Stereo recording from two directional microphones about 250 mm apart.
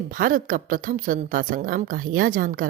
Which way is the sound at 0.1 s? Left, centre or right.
Right.